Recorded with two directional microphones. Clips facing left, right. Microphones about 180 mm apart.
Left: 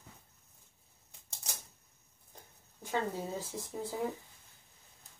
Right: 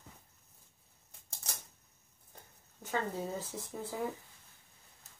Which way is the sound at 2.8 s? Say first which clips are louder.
Left 1 dB; 15° left (ahead or behind).